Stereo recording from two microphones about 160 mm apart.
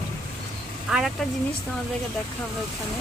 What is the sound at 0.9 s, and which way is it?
Speech, 5° right (ahead or behind).